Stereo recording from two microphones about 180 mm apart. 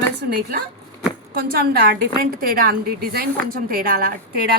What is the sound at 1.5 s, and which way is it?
A woman's voice, 60° right (ahead or behind).